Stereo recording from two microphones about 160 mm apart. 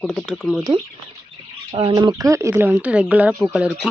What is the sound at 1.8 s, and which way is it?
A woman's voice, 30° right (ahead or behind).